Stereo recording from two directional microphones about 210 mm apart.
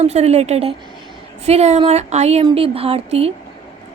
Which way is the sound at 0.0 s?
30° right (ahead or behind).